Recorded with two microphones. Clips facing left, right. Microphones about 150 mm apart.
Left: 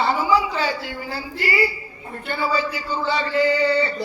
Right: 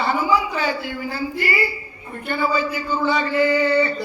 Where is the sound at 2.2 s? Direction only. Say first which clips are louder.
Right 2 dB; 50° right (ahead or behind).